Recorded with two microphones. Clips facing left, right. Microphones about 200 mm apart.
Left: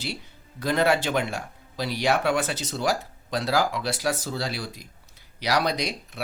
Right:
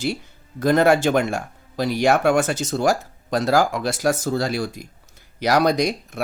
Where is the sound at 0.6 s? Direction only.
45° right (ahead or behind).